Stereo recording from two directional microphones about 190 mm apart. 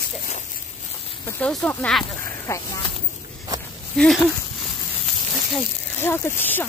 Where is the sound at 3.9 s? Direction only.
Centre (ahead or behind).